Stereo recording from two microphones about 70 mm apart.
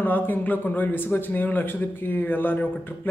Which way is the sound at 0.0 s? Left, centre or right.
Left.